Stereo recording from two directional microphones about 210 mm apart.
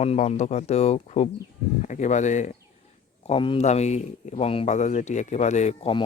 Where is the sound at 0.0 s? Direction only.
30° left (ahead or behind).